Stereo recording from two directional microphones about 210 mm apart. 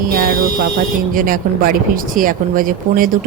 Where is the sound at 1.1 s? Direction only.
40° right (ahead or behind).